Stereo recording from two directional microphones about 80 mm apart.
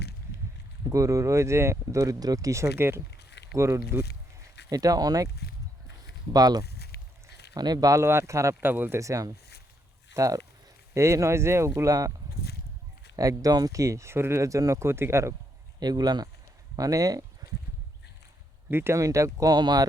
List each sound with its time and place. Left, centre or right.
0.9 s speech: right
4.7 s speech: right
6.3 s speech: right
8.0 s speech: right
8.6 s speech: right
9.0 s speech: right
11.7 s speech: right
13.1 s speech: right
15.8 s speech: right
18.7 s speech: right
18.9 s speech: right
19.5 s speech: right